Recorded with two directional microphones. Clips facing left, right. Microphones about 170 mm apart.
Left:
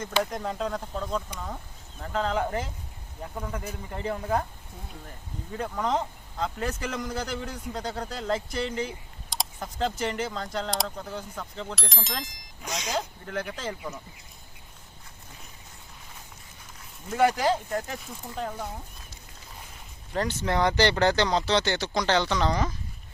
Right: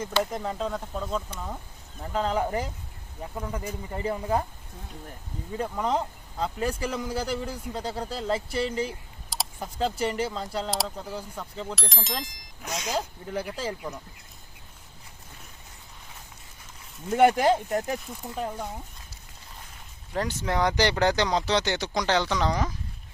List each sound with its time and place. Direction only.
0.2 s speech: 5° right (ahead or behind)
5.5 s speech: 5° right (ahead or behind)
17.1 s speech: 25° right (ahead or behind)
18.0 s speech: 10° right (ahead or behind)
20.1 s speech: 10° right (ahead or behind)